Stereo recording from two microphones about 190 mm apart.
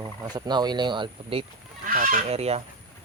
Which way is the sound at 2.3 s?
35° right (ahead or behind).